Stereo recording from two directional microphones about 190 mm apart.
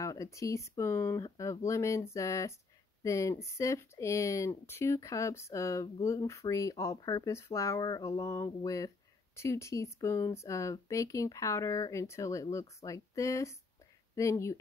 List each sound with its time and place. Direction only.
0.0 s speech: 15° left (ahead or behind)